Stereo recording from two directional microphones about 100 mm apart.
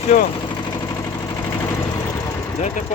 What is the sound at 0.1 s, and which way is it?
Speech, 90° left.